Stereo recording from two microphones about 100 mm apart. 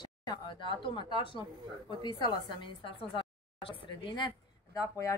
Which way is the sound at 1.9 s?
55° right (ahead or behind).